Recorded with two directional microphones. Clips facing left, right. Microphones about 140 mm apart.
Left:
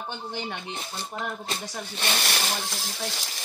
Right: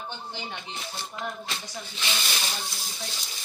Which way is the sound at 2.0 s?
55° left (ahead or behind).